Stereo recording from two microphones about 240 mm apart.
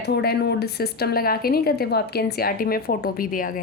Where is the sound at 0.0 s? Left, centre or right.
Left.